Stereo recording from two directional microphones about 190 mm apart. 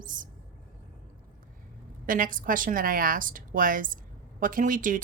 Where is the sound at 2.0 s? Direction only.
45° right (ahead or behind).